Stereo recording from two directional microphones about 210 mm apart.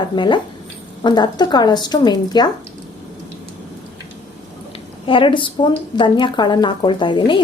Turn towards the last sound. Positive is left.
turn(degrees=20)  # may be behind; listen again after turning